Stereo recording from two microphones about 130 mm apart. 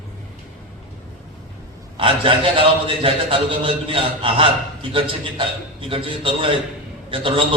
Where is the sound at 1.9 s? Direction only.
45° right (ahead or behind).